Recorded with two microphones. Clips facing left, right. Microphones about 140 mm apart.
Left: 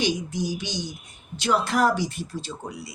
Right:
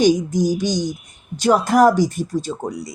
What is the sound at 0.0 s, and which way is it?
Speech, 45° right (ahead or behind).